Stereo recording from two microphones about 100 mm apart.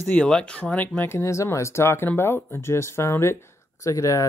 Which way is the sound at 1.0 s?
25° left (ahead or behind).